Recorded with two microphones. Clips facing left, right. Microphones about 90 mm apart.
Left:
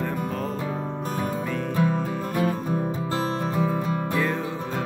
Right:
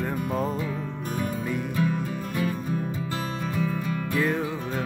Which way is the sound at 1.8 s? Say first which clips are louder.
Left 3 dB; 35° left (ahead or behind).